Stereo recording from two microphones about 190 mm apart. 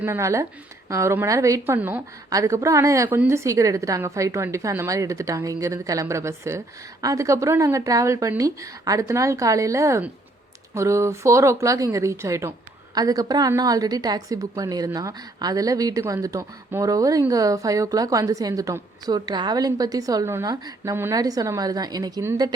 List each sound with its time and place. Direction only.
0.0 s a woman's voice: 15° right (ahead or behind)